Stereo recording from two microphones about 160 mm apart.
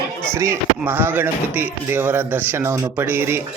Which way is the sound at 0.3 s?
15° right (ahead or behind).